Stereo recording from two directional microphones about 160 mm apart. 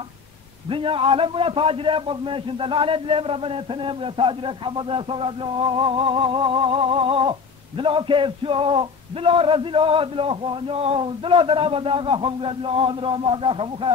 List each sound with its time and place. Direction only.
0.7 s humming: 35° right (ahead or behind)